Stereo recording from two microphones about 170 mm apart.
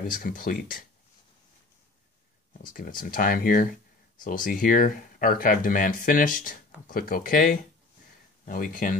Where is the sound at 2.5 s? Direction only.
55° left (ahead or behind).